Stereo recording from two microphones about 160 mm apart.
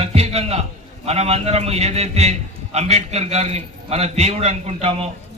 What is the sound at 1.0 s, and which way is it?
A man's voice, 40° right (ahead or behind).